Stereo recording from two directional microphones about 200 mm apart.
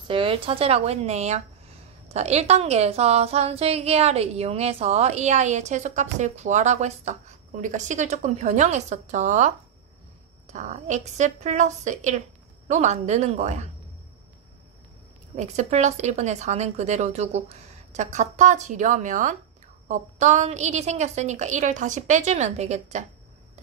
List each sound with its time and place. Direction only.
0.1 s a woman's voice: 25° right (ahead or behind)
15.3 s a woman's voice: 35° right (ahead or behind)